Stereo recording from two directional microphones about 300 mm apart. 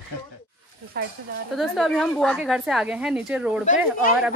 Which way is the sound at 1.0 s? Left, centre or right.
Right.